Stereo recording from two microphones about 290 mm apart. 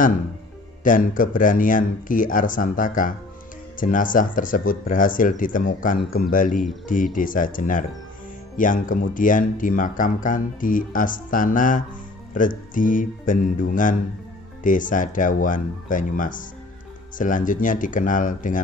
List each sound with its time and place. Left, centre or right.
0.8 s speech: left